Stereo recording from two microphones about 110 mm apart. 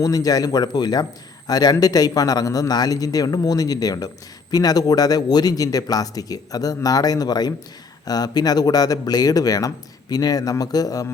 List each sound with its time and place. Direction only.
0.0 s speech: 35° left (ahead or behind)